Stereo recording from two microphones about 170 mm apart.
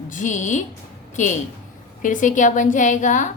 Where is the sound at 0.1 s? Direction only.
45° left (ahead or behind).